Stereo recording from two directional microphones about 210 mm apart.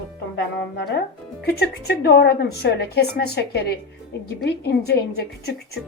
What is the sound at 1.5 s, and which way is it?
A woman's voice, 50° left (ahead or behind).